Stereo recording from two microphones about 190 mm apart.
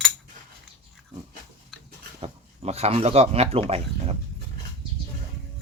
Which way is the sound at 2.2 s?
35° right (ahead or behind).